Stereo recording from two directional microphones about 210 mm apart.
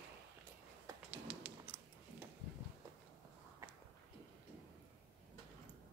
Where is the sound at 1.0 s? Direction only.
10° right (ahead or behind).